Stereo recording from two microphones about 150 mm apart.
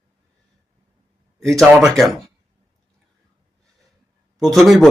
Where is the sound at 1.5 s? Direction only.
Centre (ahead or behind).